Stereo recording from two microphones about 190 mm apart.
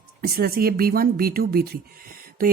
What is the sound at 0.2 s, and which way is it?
A man's voice, 50° right (ahead or behind).